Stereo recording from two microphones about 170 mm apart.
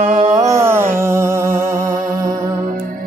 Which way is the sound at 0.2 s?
20° right (ahead or behind).